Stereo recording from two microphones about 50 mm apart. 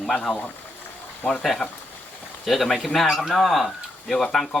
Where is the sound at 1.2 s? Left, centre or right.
Left.